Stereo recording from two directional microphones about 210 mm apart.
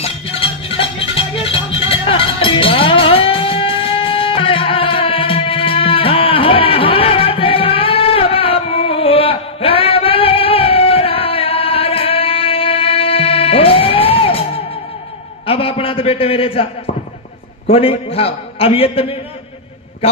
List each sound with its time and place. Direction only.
0.0 s music: 30° left (ahead or behind)
15.4 s a sound: 25° left (ahead or behind)
17.6 s a man's voice: 25° left (ahead or behind)